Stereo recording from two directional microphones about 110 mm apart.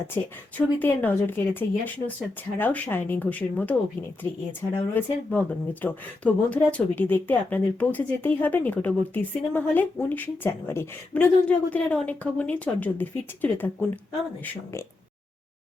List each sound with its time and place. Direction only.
0.1 s a woman's voice: 15° left (ahead or behind)
4.9 s a woman's voice: 15° left (ahead or behind)